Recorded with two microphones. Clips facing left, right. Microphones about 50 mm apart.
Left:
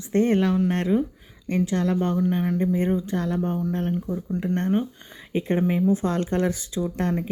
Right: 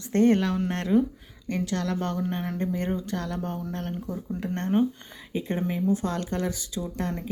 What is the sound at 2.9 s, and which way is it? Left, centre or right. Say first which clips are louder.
Speech: left 5 dB; left.